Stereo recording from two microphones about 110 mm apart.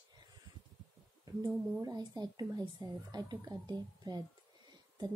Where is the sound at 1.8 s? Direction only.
35° right (ahead or behind).